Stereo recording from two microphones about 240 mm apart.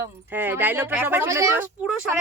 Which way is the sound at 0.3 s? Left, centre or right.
Centre.